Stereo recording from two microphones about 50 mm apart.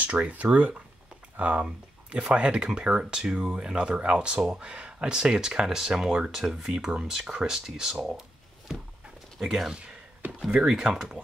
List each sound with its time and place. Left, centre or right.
0.0 s speech: right
1.6 s speech: right
8.7 s a sound: centre
9.4 s speech: centre
10.8 s speech: centre